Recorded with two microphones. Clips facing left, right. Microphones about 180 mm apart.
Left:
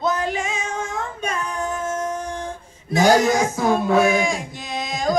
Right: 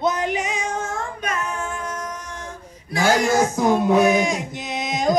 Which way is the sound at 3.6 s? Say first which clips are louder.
Right 1 dB; 15° right (ahead or behind).